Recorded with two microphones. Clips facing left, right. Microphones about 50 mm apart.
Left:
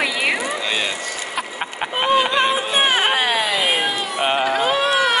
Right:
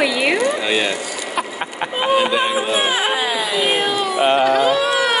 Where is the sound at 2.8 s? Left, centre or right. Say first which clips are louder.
Left 1 dB; left.